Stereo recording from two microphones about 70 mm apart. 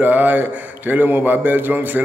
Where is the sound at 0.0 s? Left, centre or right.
Right.